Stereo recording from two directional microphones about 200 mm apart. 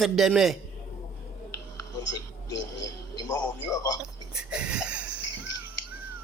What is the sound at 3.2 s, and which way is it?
Speech, 20° left (ahead or behind).